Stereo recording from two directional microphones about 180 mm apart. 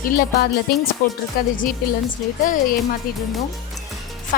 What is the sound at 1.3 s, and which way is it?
Speech, 55° left (ahead or behind).